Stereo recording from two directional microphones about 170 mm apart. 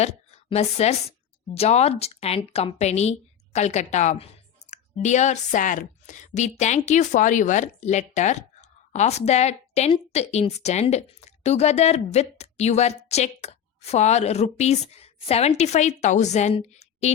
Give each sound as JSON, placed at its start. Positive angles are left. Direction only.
{"t": 0.0, "sound": "a woman's voice", "side_deg": 40}